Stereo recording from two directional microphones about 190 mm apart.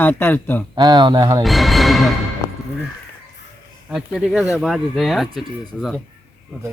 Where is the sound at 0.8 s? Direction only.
20° right (ahead or behind).